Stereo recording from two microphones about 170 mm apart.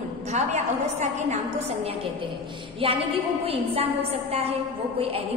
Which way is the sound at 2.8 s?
35° right (ahead or behind).